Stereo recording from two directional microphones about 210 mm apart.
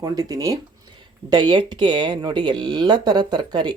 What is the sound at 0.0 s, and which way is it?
Speech, 15° right (ahead or behind).